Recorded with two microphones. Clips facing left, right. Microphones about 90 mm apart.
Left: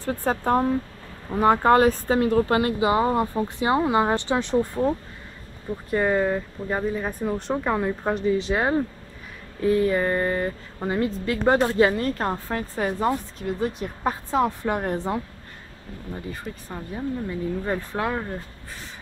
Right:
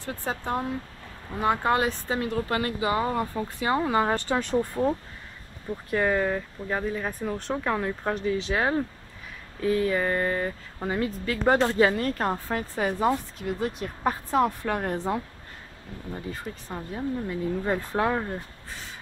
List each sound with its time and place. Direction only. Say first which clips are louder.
0.0 s speech: left 7 dB; 40° left (ahead or behind); by 4.6 s 20° left (ahead or behind)
5.9 s speech: left 3 dB; 5° left (ahead or behind)
16.6 s speech: left 1 dB; centre (ahead or behind)